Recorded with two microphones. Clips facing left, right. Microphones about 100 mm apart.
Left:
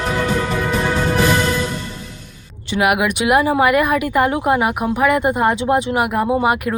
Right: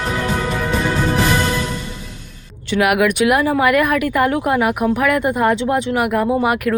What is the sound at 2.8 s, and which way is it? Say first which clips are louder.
Speech: right 2 dB; 5° left (ahead or behind).